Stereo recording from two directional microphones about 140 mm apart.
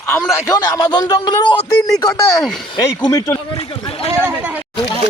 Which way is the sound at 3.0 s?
25° left (ahead or behind).